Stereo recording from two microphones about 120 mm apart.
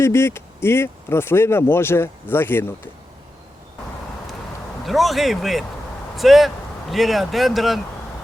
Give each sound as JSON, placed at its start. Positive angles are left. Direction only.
{"t": 0.0, "sound": "speech", "side_deg": 20}
{"t": 4.9, "sound": "speech", "side_deg": 0}